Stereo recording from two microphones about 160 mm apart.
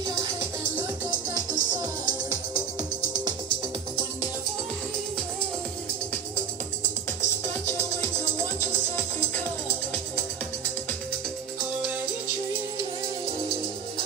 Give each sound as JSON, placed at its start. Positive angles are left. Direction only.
{"t": 0.0, "sound": "music", "side_deg": -20}
{"t": 1.5, "sound": "music", "side_deg": -25}
{"t": 8.4, "sound": "music", "side_deg": 15}